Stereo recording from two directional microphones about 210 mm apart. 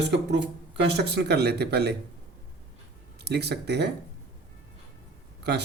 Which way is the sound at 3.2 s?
50° right (ahead or behind).